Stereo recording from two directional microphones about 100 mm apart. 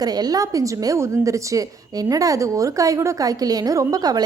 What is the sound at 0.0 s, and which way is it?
A woman's voice, 40° right (ahead or behind).